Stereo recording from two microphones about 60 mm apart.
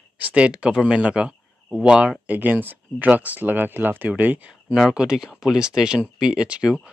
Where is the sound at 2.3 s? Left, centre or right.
Right.